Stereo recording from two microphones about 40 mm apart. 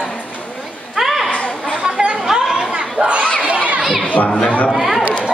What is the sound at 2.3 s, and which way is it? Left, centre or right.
Chatter, centre.